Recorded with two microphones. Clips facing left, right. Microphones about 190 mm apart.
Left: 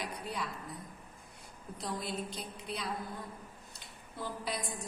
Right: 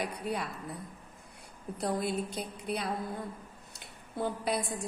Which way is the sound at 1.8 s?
60° right (ahead or behind).